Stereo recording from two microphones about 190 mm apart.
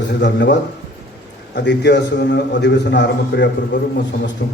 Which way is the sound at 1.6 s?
65° left (ahead or behind).